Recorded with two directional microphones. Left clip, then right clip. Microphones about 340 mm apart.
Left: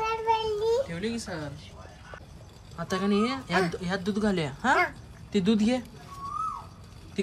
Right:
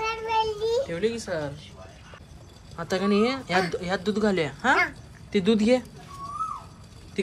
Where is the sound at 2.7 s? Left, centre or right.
Centre.